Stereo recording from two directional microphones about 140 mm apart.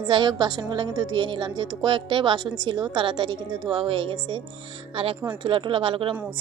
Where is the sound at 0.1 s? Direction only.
30° right (ahead or behind).